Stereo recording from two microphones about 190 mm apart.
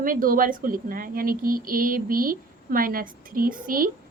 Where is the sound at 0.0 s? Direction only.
45° right (ahead or behind).